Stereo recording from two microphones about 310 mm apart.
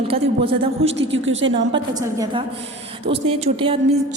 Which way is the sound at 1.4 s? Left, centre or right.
Right.